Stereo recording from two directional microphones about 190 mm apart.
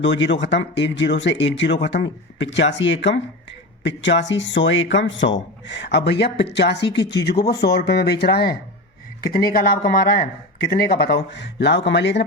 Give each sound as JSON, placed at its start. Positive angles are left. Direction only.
{"t": 0.0, "sound": "speech", "side_deg": 70}